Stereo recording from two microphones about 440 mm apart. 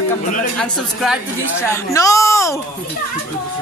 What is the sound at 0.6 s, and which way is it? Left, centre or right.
Speech, centre.